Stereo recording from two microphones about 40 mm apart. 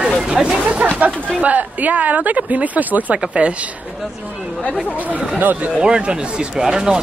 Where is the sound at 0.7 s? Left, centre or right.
Right.